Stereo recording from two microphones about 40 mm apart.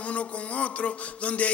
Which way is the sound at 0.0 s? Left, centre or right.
Left.